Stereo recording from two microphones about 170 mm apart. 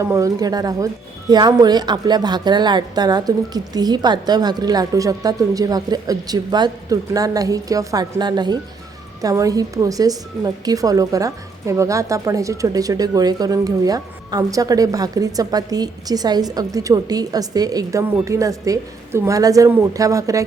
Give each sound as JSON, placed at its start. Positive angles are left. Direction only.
{"t": 0.0, "sound": "a woman's voice", "side_deg": -20}